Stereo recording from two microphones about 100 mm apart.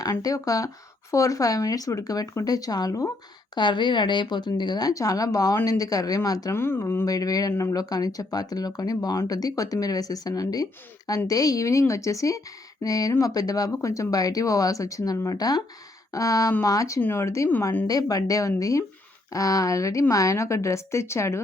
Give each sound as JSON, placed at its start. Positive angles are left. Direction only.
{"t": 0.0, "sound": "speech", "side_deg": 35}
{"t": 3.5, "sound": "speech", "side_deg": 50}
{"t": 6.6, "sound": "speech", "side_deg": 25}